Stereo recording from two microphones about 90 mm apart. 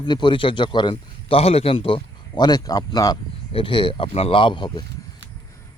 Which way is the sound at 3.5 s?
70° left (ahead or behind).